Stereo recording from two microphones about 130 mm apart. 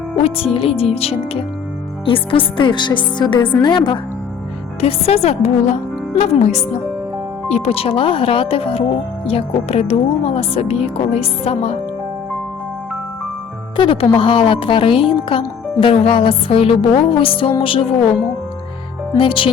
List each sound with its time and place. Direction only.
0.2 s speech: 50° left (ahead or behind)
4.8 s a woman's voice: 50° left (ahead or behind)
13.7 s speech: 45° left (ahead or behind)
19.2 s speech: 40° left (ahead or behind)